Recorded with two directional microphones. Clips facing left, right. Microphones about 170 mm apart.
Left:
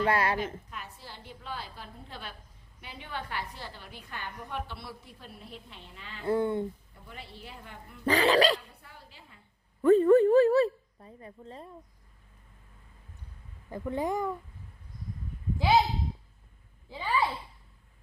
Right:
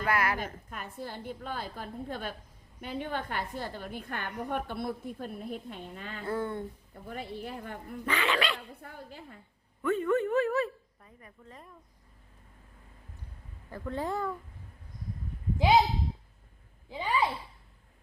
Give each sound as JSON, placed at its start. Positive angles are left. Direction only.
{"t": 0.0, "sound": "speech", "side_deg": 30}
{"t": 0.3, "sound": "a woman's voice", "side_deg": -50}
{"t": 6.2, "sound": "speech", "side_deg": 20}
{"t": 7.1, "sound": "a woman's voice", "side_deg": -50}
{"t": 8.0, "sound": "a woman's voice", "side_deg": 35}
{"t": 8.8, "sound": "a woman's voice", "side_deg": -50}
{"t": 9.8, "sound": "a woman's voice", "side_deg": 35}
{"t": 13.7, "sound": "speech", "side_deg": 15}
{"t": 16.9, "sound": "speech", "side_deg": -20}